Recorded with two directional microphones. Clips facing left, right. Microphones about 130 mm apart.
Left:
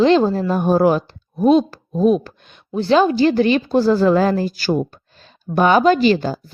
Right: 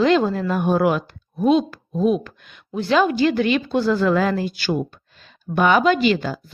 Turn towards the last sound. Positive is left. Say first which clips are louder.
# left 4 dB
turn(degrees=35)  # may be behind; listen again after turning